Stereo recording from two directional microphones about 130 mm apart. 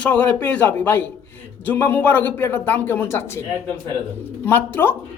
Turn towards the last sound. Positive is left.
turn(degrees=15)  # may be behind; listen again after turning